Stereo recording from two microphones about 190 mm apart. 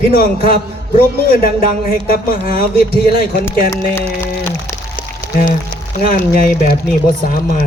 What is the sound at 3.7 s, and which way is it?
Speech, 15° left (ahead or behind).